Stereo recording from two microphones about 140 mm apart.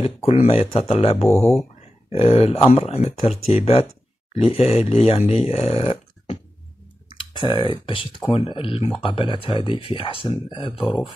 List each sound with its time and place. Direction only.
0.0 s speech: 40° left (ahead or behind)
1.4 s speech: 20° left (ahead or behind)
2.0 s speech: 50° left (ahead or behind)
7.2 s speech: 35° left (ahead or behind)